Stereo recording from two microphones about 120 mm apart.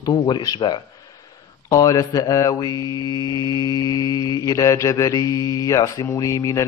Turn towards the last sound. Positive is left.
turn(degrees=25)  # may be behind; listen again after turning